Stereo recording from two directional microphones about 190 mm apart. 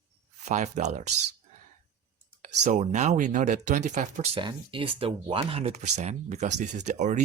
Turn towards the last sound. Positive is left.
turn(degrees=-40)  # may be behind; listen again after turning